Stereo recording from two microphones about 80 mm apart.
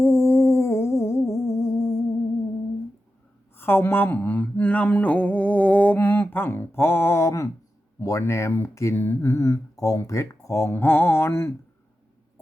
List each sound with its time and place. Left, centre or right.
0.0 s music: left
3.5 s a sound: left
7.9 s speech: left